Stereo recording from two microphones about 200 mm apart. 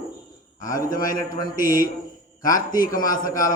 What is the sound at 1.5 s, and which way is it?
A man's voice, 45° left (ahead or behind).